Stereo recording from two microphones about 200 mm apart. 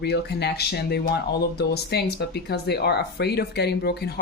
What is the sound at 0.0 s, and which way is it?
Speech, 55° left (ahead or behind).